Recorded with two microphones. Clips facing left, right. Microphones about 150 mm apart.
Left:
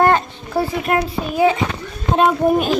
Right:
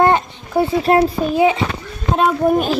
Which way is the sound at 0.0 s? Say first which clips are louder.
Right 1 dB; 20° right (ahead or behind).